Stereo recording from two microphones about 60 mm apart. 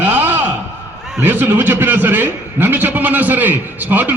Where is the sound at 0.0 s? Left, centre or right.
Right.